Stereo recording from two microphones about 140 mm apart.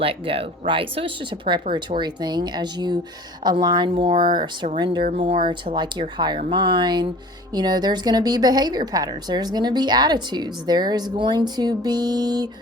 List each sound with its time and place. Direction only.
0.0 s a woman's voice: 40° right (ahead or behind)